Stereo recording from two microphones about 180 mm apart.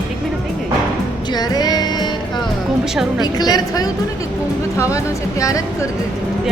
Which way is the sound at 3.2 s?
20° left (ahead or behind).